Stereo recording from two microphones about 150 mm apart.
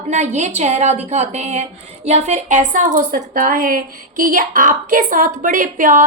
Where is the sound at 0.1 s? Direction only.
50° right (ahead or behind).